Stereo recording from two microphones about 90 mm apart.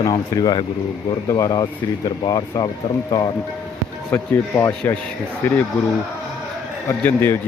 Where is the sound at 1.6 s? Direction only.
50° left (ahead or behind).